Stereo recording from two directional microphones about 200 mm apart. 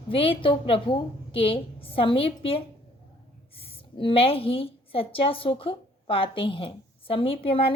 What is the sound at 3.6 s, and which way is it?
A woman's voice, 30° left (ahead or behind).